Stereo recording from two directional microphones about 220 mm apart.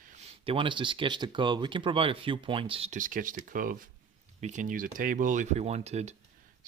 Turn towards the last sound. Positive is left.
turn(degrees=-30)  # may be behind; listen again after turning